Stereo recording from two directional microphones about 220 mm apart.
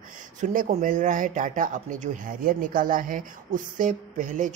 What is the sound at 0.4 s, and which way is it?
Speech, 35° right (ahead or behind).